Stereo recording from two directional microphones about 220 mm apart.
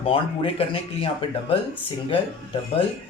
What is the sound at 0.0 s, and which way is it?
Speech, 25° left (ahead or behind).